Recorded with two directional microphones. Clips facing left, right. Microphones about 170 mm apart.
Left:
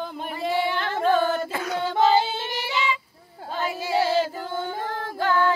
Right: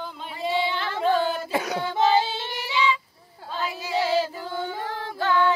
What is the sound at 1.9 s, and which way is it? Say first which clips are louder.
Child singing: left 1 dB; 50° left (ahead or behind).